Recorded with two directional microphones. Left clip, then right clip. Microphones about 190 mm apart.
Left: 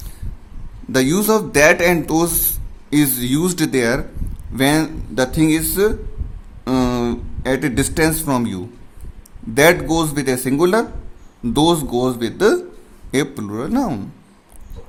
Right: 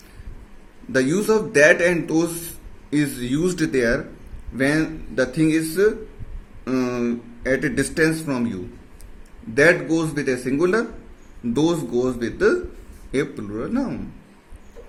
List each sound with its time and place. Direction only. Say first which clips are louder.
0.9 s speech: left 3 dB; 45° left (ahead or behind)
9.6 s speech: left 3 dB; 50° left (ahead or behind)